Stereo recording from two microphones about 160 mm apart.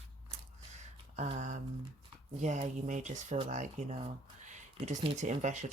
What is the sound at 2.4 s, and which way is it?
Speech, 50° right (ahead or behind).